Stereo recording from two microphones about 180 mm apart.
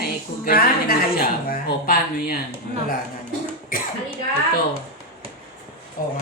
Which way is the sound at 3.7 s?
50° left (ahead or behind).